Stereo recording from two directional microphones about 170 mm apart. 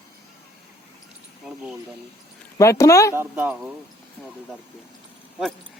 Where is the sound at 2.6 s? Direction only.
15° left (ahead or behind).